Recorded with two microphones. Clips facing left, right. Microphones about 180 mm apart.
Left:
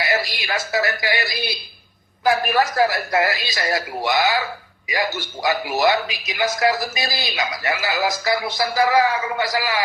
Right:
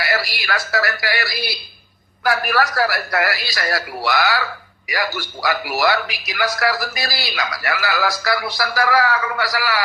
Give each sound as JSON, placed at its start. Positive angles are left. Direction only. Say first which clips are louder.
{"t": 0.0, "sound": "a man's voice", "louder": "even", "side_deg": 20}